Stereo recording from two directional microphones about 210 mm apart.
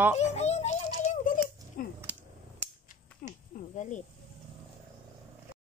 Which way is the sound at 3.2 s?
45° left (ahead or behind).